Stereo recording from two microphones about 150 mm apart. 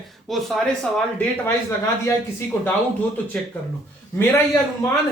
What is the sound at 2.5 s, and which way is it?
Speech, 15° left (ahead or behind).